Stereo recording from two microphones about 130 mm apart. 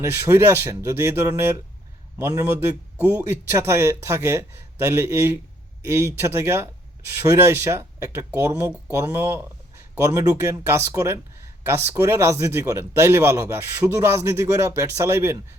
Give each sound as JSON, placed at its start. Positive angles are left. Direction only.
{"t": 0.0, "sound": "a man's voice", "side_deg": -20}